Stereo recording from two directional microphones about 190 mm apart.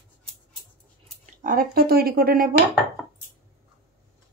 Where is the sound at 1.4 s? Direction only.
45° right (ahead or behind).